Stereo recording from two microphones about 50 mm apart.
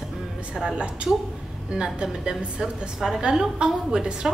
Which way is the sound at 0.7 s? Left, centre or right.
Right.